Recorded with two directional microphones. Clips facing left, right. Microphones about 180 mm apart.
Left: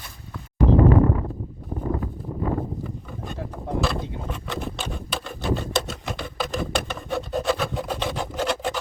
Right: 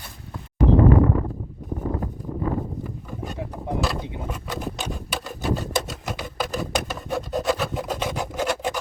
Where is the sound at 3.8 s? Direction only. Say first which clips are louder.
Even; 5° right (ahead or behind).